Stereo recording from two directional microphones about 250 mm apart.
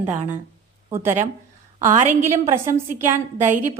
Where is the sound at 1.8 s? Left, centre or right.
Right.